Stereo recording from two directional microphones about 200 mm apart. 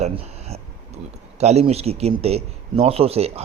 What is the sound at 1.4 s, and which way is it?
Speech, 30° right (ahead or behind).